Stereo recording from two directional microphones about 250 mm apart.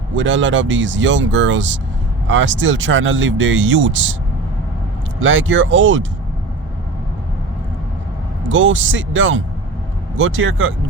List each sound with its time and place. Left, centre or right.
0.1 s speech: right
5.2 s speech: right
8.4 s speech: right